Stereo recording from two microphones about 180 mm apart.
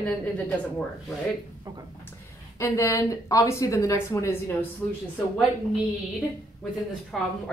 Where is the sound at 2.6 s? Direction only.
15° left (ahead or behind).